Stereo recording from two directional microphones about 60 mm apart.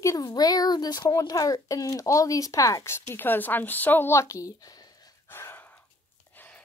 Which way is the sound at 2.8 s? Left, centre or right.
Left.